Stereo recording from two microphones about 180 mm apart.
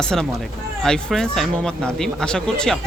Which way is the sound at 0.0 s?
5° left (ahead or behind).